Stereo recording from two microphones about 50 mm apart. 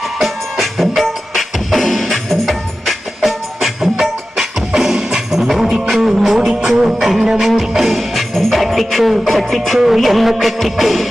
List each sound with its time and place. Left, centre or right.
0.2 s music: centre